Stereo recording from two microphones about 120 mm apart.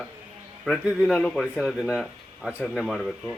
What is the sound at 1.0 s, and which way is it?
Speech, 5° left (ahead or behind).